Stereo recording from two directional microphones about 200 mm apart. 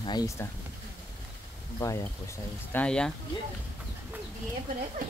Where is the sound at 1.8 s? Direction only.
15° left (ahead or behind).